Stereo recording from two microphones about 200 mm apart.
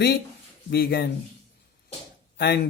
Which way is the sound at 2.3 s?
55° left (ahead or behind).